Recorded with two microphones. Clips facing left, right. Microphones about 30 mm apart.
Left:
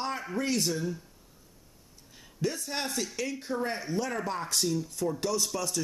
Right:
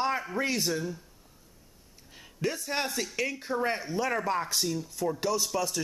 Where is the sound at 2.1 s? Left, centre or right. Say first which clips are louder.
Left 2 dB; right.